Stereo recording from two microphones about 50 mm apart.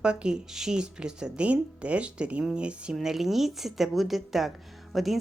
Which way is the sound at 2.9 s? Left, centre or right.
Centre.